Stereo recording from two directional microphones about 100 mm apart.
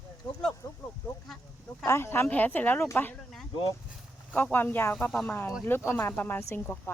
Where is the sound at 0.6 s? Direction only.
35° left (ahead or behind).